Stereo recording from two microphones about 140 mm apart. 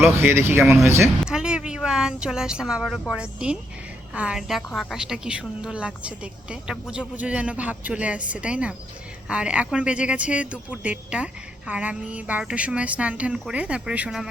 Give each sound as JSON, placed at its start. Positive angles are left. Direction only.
{"t": 0.0, "sound": "speech", "side_deg": -15}
{"t": 1.2, "sound": "vehicle", "side_deg": -5}
{"t": 2.2, "sound": "a woman's voice", "side_deg": -5}